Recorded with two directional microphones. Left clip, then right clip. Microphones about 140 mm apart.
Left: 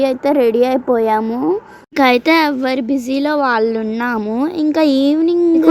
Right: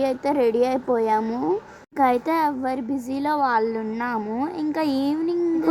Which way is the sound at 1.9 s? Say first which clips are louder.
Left 8 dB; 25° left (ahead or behind).